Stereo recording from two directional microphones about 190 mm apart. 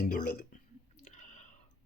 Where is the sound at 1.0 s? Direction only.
40° left (ahead or behind).